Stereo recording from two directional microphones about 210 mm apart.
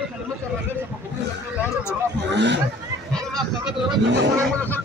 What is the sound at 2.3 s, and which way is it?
Speech, 55° right (ahead or behind).